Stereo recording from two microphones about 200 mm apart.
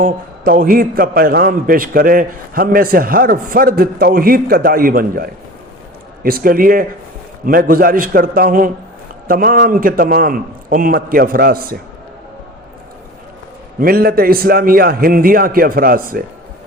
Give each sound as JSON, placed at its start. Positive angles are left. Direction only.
{"t": 0.0, "sound": "a man's voice", "side_deg": -45}
{"t": 13.7, "sound": "a man's voice", "side_deg": -50}